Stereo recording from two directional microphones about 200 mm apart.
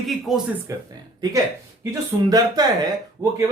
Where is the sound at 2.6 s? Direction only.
20° right (ahead or behind).